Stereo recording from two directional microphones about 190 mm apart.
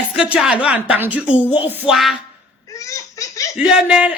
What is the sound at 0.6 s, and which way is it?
A woman's voice, 5° right (ahead or behind).